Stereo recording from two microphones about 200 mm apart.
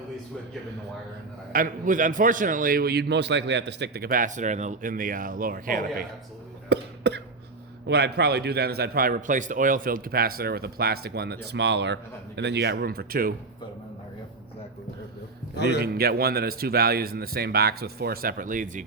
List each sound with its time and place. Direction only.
1.5 s a man's voice: 40° right (ahead or behind)
6.7 s cough: 55° right (ahead or behind)
7.9 s a man's voice: 55° right (ahead or behind)
15.8 s a man's voice: 50° right (ahead or behind)